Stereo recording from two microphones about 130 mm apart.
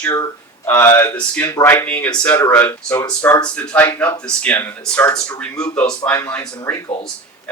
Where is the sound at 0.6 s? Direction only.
15° left (ahead or behind).